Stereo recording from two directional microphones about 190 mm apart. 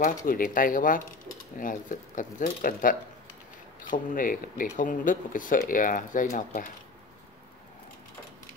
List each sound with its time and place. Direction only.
0.3 s speech: 45° left (ahead or behind)